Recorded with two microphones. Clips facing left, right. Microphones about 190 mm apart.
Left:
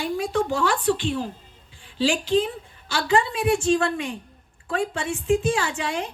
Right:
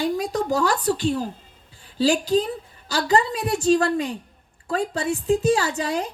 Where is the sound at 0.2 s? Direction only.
40° right (ahead or behind).